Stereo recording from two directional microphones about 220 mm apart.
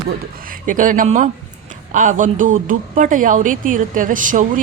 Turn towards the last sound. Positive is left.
turn(degrees=-35)  # may be behind; listen again after turning